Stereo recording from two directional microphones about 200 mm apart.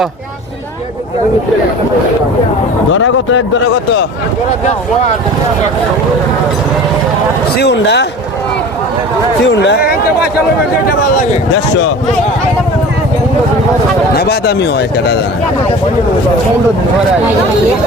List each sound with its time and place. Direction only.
2.9 s a man's voice: 70° left (ahead or behind)
7.5 s speech: 55° left (ahead or behind)
9.5 s speech: 60° left (ahead or behind)
14.2 s speech: 55° left (ahead or behind)